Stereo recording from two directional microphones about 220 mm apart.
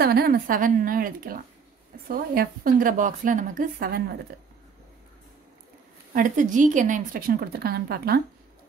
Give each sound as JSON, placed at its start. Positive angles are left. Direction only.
{"t": 0.0, "sound": "a woman's voice", "side_deg": -45}
{"t": 6.1, "sound": "a woman's voice", "side_deg": -35}